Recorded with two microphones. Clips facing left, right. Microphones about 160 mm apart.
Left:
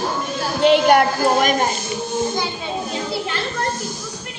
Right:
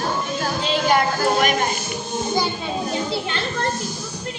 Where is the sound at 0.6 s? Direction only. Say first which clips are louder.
Left 7 dB; 60° left (ahead or behind).